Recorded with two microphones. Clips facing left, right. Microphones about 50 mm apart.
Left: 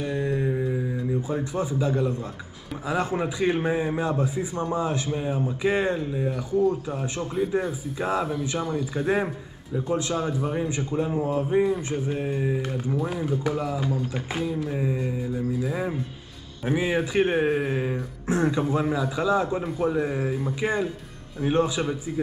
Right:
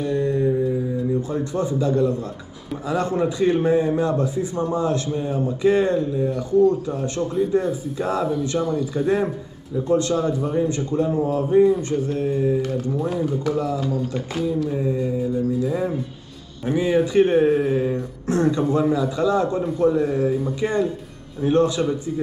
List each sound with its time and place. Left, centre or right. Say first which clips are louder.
0.0 s mantra: right 5 dB; centre
1.3 s a man's voice: right 4 dB; centre
12.9 s a man's voice: right 1 dB; centre